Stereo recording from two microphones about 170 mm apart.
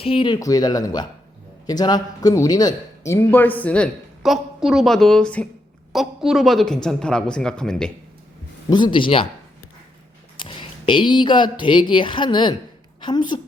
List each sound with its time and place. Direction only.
0.0 s speech: 30° left (ahead or behind)
0.3 s a woman's voice: 20° left (ahead or behind); by 7.9 s 5° left (ahead or behind)
8.7 s speech: 30° left (ahead or behind)
10.3 s a woman's voice: 30° left (ahead or behind)